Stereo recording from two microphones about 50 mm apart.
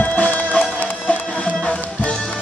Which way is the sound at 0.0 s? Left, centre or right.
Left.